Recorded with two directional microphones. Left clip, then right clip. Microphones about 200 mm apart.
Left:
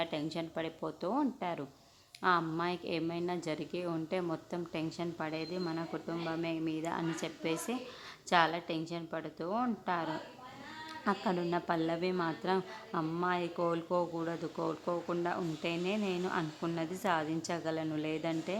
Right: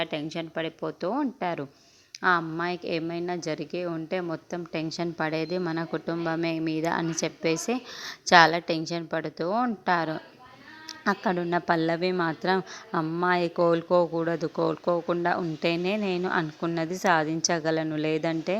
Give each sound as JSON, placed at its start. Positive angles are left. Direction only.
{"t": 0.0, "sound": "a woman's voice", "side_deg": -25}